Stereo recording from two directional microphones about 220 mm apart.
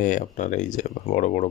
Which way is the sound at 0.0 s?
35° left (ahead or behind).